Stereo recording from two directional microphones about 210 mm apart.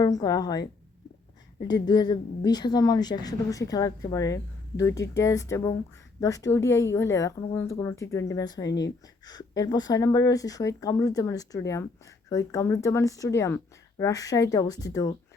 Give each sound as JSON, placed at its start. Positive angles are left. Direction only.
{"t": 0.0, "sound": "a woman's voice", "side_deg": 15}